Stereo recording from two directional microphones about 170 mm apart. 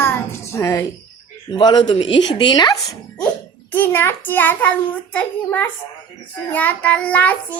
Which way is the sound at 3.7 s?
10° left (ahead or behind).